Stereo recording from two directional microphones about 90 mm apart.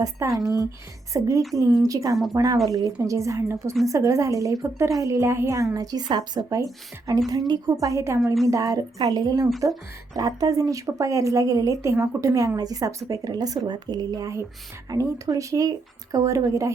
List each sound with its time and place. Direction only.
0.0 s a woman's voice: 40° right (ahead or behind)
5.7 s a woman's voice: 45° right (ahead or behind)